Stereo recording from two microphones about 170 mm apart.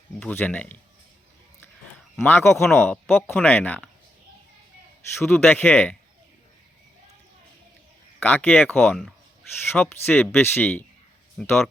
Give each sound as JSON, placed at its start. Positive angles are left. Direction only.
{"t": 0.2, "sound": "speech", "side_deg": 10}
{"t": 2.2, "sound": "speech", "side_deg": 15}
{"t": 5.2, "sound": "speech", "side_deg": 10}
{"t": 8.2, "sound": "speech", "side_deg": 10}